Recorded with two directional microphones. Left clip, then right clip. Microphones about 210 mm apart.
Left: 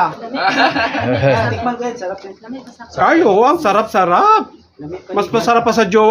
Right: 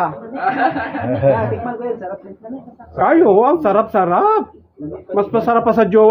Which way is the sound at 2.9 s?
5° right (ahead or behind).